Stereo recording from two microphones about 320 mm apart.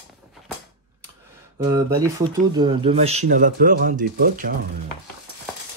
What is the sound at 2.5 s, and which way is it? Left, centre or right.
Speech, centre.